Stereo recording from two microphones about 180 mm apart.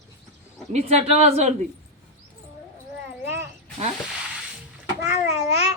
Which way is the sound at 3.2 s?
15° right (ahead or behind).